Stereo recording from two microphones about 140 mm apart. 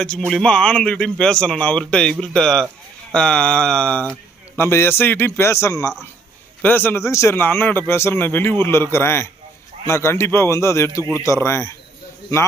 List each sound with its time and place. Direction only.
0.0 s a man's voice: 5° left (ahead or behind)
4.5 s a man's voice: 15° left (ahead or behind)